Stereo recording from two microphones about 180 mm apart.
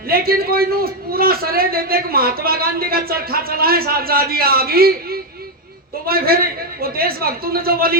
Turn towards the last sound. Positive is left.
turn(degrees=-55)  # may be behind; listen again after turning